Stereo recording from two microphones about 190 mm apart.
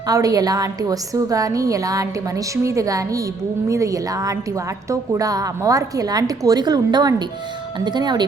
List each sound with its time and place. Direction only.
0.1 s a woman's voice: 20° right (ahead or behind)